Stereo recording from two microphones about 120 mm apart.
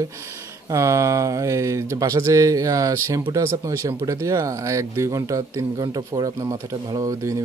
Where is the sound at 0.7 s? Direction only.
25° right (ahead or behind).